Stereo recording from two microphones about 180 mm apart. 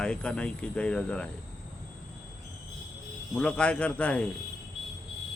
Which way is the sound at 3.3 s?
5° left (ahead or behind).